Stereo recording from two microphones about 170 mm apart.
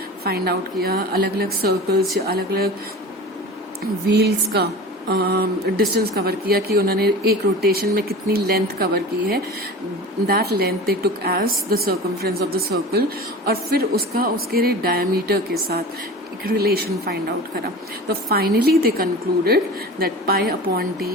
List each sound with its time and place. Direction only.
0.3 s a woman's voice: 65° right (ahead or behind)
4.1 s a woman's voice: 75° right (ahead or behind)